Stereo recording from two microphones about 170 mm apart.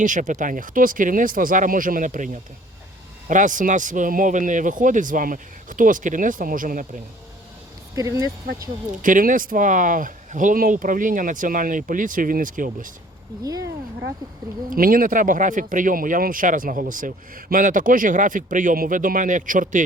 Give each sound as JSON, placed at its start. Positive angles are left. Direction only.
{"t": 0.0, "sound": "speech", "side_deg": -50}
{"t": 7.9, "sound": "speech", "side_deg": -20}
{"t": 9.0, "sound": "speech", "side_deg": -50}
{"t": 14.7, "sound": "speech", "side_deg": -55}